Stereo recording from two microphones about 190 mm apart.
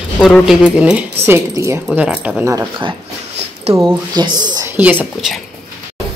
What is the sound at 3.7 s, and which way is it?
Speech, 20° right (ahead or behind).